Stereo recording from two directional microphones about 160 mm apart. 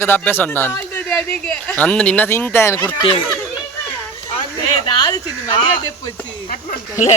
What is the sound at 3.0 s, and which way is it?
Speech, 35° left (ahead or behind).